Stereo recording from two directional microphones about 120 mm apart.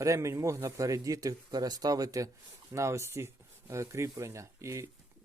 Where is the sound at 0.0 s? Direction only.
25° right (ahead or behind).